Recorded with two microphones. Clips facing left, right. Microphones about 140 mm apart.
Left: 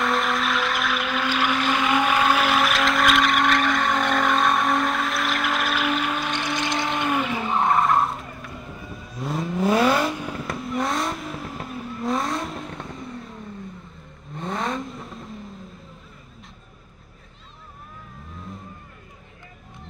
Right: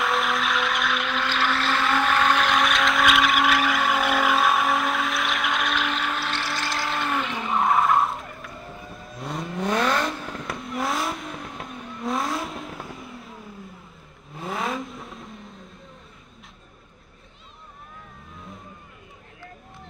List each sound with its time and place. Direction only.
0.0 s vehicle: centre (ahead or behind)
6.1 s a sound: 15° left (ahead or behind)
7.1 s vehicle: 5° left (ahead or behind)